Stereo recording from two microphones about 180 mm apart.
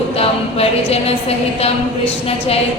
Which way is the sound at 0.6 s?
35° left (ahead or behind).